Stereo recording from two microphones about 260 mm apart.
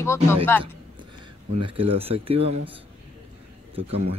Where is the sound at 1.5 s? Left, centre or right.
Right.